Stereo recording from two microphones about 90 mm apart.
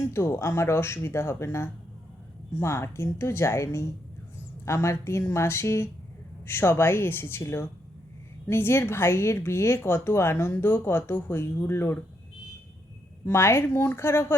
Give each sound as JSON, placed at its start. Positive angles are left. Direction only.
{"t": 0.1, "sound": "a woman's voice", "side_deg": 30}
{"t": 13.2, "sound": "a woman's voice", "side_deg": 30}